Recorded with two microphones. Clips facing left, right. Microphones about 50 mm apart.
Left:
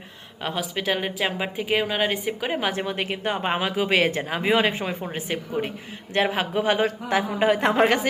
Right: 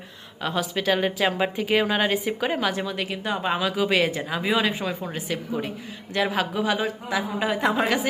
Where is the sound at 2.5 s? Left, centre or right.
Left.